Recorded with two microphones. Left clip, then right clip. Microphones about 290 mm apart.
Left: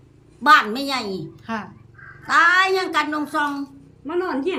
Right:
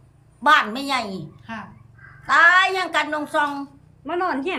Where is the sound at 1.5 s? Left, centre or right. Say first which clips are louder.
Left 5 dB; centre.